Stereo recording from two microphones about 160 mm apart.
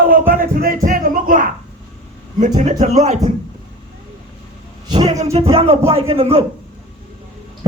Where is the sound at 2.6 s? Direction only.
50° right (ahead or behind).